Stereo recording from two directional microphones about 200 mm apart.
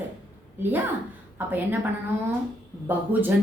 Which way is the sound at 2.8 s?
10° right (ahead or behind).